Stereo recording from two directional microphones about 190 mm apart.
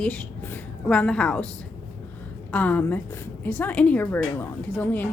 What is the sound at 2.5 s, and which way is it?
A woman's voice, 10° left (ahead or behind).